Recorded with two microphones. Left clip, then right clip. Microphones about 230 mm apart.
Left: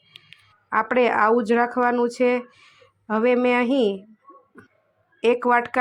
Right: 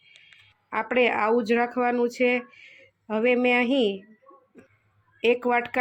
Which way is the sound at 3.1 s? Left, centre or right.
Centre.